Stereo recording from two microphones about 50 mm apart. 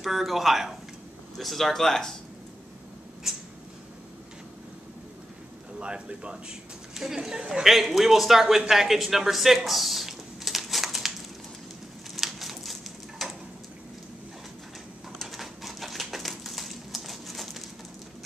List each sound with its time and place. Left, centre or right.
0.0 s a man's voice: centre
3.3 s a sound: centre
5.8 s speech: centre
6.9 s a man's voice: centre
9.7 s crumpling: centre
12.2 s a sound: centre
15.1 s bird: centre